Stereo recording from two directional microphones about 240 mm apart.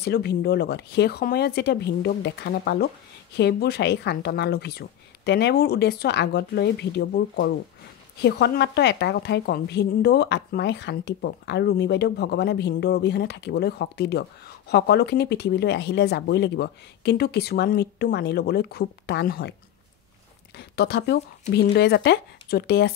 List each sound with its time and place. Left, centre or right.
0.0 s a woman's voice: left
20.5 s a woman's voice: left